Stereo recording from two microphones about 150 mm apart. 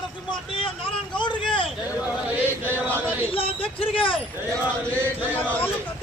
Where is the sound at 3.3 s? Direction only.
40° left (ahead or behind).